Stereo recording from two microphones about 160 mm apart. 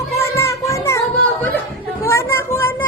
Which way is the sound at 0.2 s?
20° left (ahead or behind).